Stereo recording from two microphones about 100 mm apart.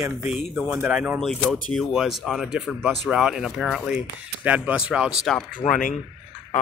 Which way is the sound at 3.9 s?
15° right (ahead or behind).